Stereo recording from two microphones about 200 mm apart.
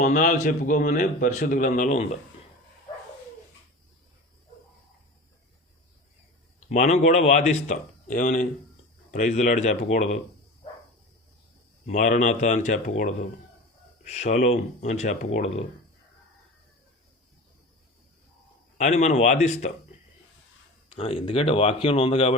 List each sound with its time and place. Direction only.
0.0 s speech: 40° left (ahead or behind)
6.7 s speech: 35° left (ahead or behind)
11.9 s speech: 40° left (ahead or behind)
14.1 s speech: 35° left (ahead or behind)
18.8 s speech: 35° left (ahead or behind)
20.9 s speech: 30° left (ahead or behind)